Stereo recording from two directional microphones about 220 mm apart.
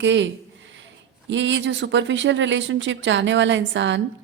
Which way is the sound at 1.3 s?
55° right (ahead or behind).